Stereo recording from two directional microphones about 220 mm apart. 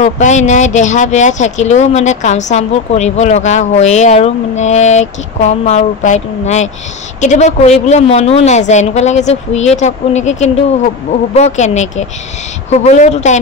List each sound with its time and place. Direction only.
0.0 s speech: 35° left (ahead or behind)